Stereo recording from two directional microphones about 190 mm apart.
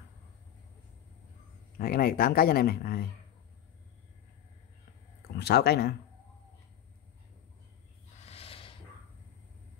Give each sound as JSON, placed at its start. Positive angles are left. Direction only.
{"t": 1.8, "sound": "speech", "side_deg": 50}
{"t": 5.3, "sound": "speech", "side_deg": 60}
{"t": 8.3, "sound": "a sound", "side_deg": 30}